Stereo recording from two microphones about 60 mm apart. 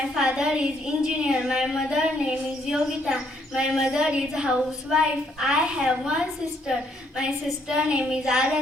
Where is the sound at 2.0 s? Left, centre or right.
Centre.